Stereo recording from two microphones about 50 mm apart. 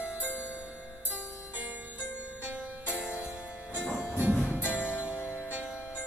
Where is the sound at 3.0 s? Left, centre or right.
Centre.